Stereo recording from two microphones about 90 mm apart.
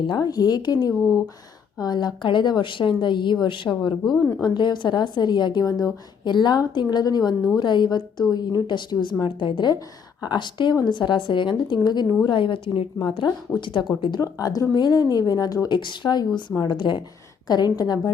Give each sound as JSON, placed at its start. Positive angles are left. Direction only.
{"t": 0.1, "sound": "a woman's voice", "side_deg": 45}
{"t": 4.4, "sound": "a woman's voice", "side_deg": 55}
{"t": 13.0, "sound": "a woman's voice", "side_deg": 65}
{"t": 14.2, "sound": "a woman's voice", "side_deg": 45}
{"t": 15.7, "sound": "a woman's voice", "side_deg": 60}
{"t": 17.5, "sound": "a woman's voice", "side_deg": 50}